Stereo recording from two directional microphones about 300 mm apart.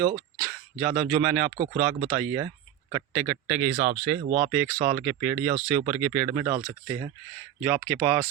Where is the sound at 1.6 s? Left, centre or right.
Centre.